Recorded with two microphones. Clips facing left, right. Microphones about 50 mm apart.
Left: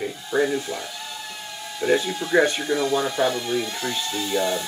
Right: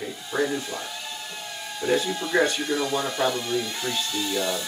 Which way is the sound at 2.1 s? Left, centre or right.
Centre.